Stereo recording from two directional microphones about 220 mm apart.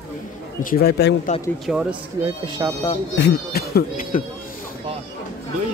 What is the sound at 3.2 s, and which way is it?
Speech, 50° left (ahead or behind).